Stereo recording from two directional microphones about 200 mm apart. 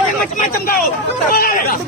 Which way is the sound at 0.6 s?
45° left (ahead or behind).